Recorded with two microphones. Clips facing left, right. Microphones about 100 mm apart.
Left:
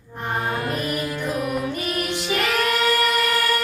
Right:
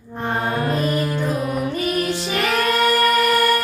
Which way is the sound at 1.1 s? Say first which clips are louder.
Right 2 dB; 25° right (ahead or behind).